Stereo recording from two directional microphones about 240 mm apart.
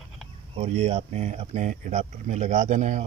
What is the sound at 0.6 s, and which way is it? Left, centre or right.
Speech, right.